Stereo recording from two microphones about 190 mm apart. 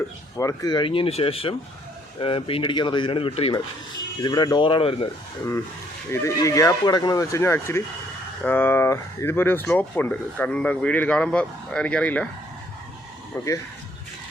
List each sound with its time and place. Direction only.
0.3 s speech: 20° left (ahead or behind)
6.1 s speech: 15° left (ahead or behind)